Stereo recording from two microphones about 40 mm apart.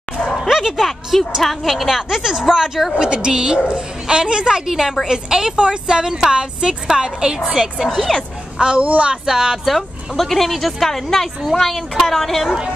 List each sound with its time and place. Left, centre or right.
0.4 s a sound: centre
1.4 s a woman's voice: centre
8.5 s speech: right
8.8 s speech: right
9.1 s a woman's voice: centre
9.7 s speech: centre